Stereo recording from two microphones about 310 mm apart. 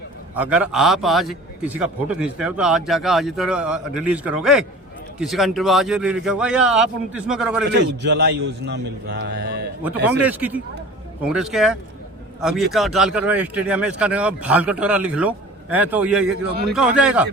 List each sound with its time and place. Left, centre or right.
0.3 s a man's voice: centre
7.7 s a man's voice: right
9.8 s a man's voice: centre